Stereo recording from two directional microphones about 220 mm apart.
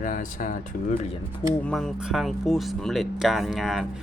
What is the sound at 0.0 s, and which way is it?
Speech, 35° left (ahead or behind).